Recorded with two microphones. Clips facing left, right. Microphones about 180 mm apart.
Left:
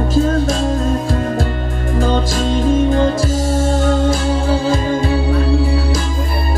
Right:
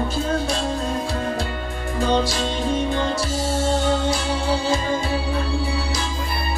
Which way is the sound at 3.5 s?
50° left (ahead or behind).